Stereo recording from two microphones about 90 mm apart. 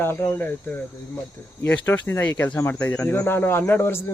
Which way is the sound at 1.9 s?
25° left (ahead or behind).